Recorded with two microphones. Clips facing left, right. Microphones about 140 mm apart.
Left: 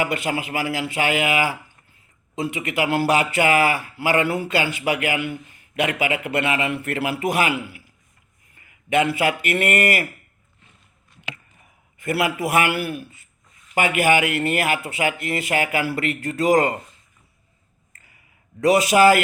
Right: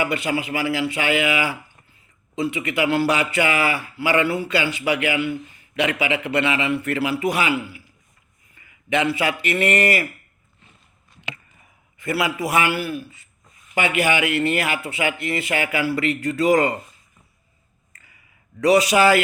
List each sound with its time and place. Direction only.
0.0 s a man's voice: 45° left (ahead or behind)
11.9 s a man's voice: 50° left (ahead or behind)
17.9 s a sound: 50° left (ahead or behind)
18.6 s a man's voice: 50° left (ahead or behind)